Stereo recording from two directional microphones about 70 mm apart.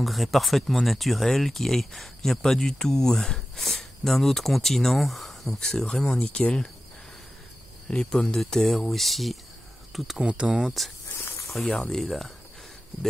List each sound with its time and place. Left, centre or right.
0.0 s speech: centre
7.9 s speech: centre
10.2 s speech: centre
11.1 s snake: left
11.7 s speech: centre